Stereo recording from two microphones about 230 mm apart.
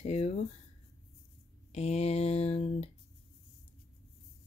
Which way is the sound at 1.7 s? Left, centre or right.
Left.